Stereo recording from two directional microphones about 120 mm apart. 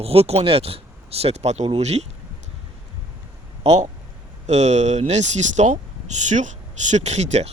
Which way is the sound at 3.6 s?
65° right (ahead or behind).